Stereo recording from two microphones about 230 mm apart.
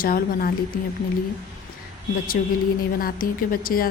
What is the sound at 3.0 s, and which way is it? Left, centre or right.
Speech, left.